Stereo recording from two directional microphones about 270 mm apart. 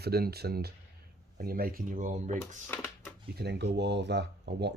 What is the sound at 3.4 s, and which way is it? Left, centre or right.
Speech, right.